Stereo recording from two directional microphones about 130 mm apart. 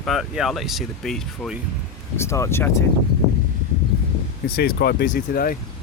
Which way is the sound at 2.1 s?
20° left (ahead or behind).